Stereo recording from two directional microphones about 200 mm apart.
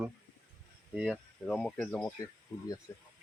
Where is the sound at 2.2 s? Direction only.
15° left (ahead or behind).